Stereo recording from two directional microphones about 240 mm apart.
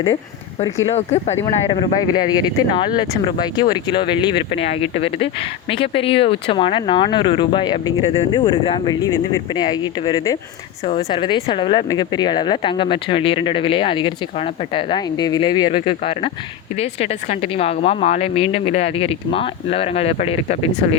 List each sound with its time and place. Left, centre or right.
0.9 s speech: left